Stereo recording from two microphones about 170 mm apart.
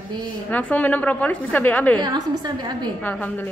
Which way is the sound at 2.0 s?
25° right (ahead or behind).